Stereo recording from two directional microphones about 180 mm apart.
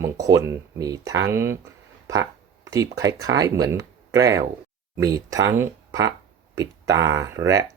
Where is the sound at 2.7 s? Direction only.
20° right (ahead or behind).